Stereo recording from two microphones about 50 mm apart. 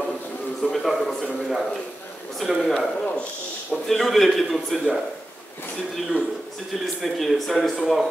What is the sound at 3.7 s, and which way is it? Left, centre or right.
A man's voice, centre.